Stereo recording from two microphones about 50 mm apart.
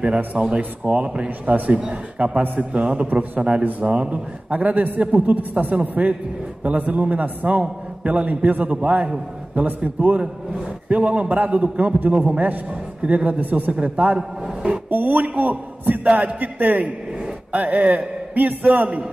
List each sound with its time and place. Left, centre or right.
0.2 s a man's voice: right
14.1 s a man's voice: centre
14.9 s a man's voice: right